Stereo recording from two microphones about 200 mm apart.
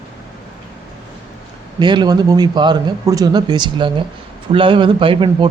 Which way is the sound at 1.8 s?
20° right (ahead or behind).